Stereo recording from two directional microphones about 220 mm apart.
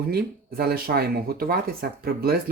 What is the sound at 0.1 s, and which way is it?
Speech, 45° right (ahead or behind).